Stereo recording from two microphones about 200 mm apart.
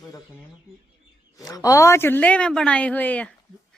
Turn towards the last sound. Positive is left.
turn(degrees=5)  # may be behind; listen again after turning